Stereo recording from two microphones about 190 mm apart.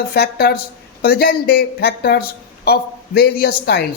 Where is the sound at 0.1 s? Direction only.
55° left (ahead or behind).